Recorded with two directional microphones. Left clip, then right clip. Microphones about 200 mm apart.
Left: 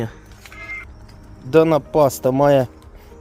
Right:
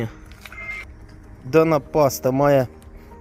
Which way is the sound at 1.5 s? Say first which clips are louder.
Left 3 dB; centre (ahead or behind).